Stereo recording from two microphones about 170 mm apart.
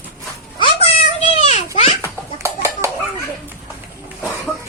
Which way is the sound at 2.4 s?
15° right (ahead or behind).